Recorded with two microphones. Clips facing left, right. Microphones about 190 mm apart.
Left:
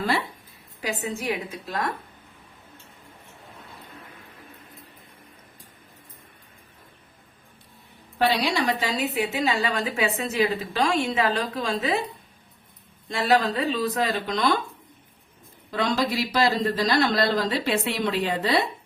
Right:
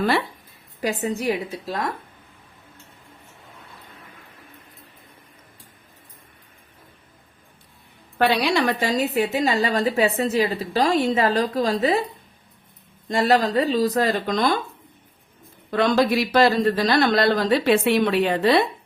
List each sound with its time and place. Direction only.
1.0 s a woman's voice: 40° right (ahead or behind)
8.2 s a man's voice: 60° right (ahead or behind)
8.9 s a woman's voice: 45° right (ahead or behind)
13.1 s a woman's voice: 40° right (ahead or behind)
15.7 s a man's voice: 60° right (ahead or behind)